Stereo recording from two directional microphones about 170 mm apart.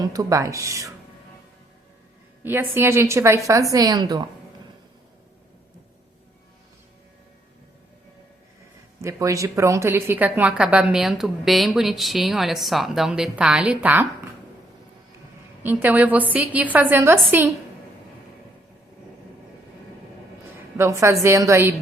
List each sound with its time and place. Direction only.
0.0 s speech: 20° right (ahead or behind)
2.4 s a woman's voice: 10° right (ahead or behind)
9.0 s a woman's voice: 15° right (ahead or behind)
15.6 s a woman's voice: 10° right (ahead or behind)
20.7 s a woman's voice: 15° right (ahead or behind)